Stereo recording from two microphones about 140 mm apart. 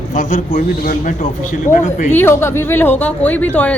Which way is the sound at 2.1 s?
15° left (ahead or behind).